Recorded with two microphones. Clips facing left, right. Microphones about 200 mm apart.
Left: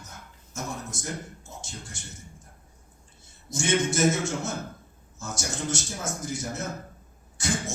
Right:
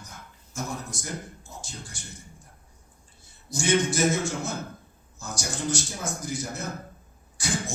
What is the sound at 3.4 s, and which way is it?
A man's voice, 25° left (ahead or behind).